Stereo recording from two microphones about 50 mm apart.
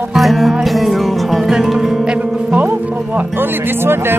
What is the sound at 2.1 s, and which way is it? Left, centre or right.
Speech, right.